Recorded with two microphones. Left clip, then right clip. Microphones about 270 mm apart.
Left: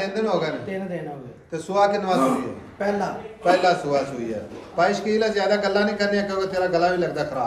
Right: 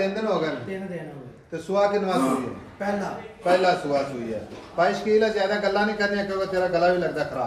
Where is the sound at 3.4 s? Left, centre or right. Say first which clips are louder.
Left 2 dB; left.